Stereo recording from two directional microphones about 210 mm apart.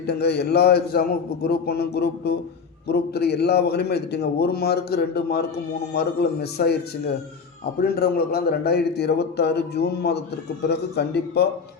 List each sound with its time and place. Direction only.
0.0 s a man's voice: 50° left (ahead or behind)
7.9 s a man's voice: 45° left (ahead or behind)